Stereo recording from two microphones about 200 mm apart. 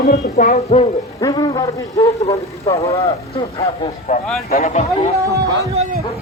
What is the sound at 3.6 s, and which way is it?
Speech, 30° left (ahead or behind).